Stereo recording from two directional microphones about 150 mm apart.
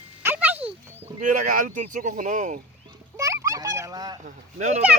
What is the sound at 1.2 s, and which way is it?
Speech, 60° right (ahead or behind).